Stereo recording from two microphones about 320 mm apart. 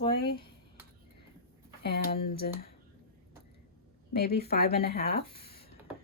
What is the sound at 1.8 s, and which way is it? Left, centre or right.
Speech, left.